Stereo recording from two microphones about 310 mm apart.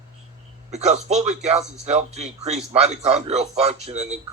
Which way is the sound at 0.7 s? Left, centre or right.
Right.